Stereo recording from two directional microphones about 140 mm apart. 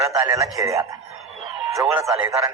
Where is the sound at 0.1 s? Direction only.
20° right (ahead or behind).